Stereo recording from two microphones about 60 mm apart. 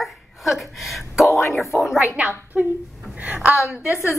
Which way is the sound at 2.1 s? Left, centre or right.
Right.